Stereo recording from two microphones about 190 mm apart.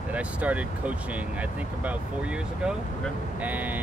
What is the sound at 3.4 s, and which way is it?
Speech, 10° right (ahead or behind).